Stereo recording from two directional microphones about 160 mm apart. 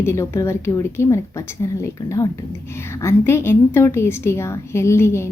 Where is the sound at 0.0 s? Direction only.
15° left (ahead or behind).